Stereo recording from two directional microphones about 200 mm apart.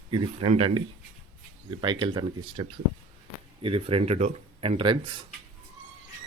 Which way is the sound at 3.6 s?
30° right (ahead or behind).